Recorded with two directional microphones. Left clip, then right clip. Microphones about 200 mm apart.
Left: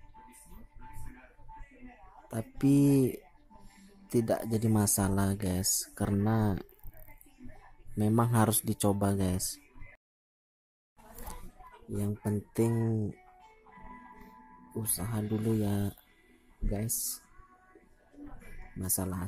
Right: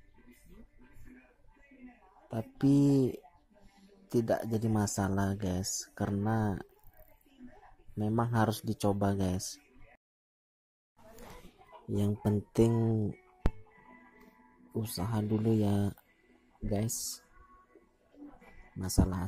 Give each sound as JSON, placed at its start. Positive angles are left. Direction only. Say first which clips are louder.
{"t": 2.2, "sound": "speech", "louder": "left 1 dB", "side_deg": -5}
{"t": 8.0, "sound": "speech", "louder": "left 2 dB", "side_deg": 5}
{"t": 11.9, "sound": "speech", "louder": "right 3 dB", "side_deg": -20}
{"t": 14.7, "sound": "speech", "louder": "right 2 dB", "side_deg": -15}
{"t": 18.9, "sound": "speech", "louder": "right 5 dB", "side_deg": -10}